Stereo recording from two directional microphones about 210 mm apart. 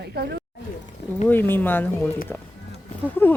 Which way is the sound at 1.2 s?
10° left (ahead or behind).